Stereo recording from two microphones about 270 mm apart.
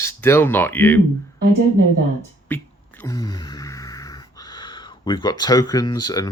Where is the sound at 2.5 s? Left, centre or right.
Centre.